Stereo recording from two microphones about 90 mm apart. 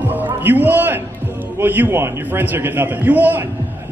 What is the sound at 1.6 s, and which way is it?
A man's voice, 20° right (ahead or behind).